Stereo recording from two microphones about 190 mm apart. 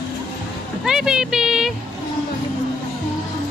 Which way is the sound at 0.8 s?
5° right (ahead or behind).